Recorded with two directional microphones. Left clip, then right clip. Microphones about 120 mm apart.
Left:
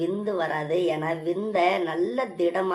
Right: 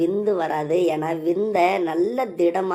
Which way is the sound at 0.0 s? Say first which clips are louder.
Right 5 dB; 40° right (ahead or behind).